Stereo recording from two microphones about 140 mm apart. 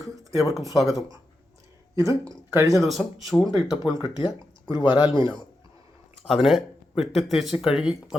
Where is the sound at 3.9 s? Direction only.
30° left (ahead or behind).